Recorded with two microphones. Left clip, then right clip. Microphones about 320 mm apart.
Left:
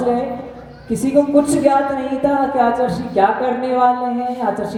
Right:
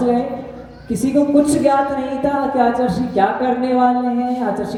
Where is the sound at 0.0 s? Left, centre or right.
Centre.